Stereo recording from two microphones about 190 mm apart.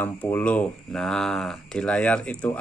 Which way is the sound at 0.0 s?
10° left (ahead or behind).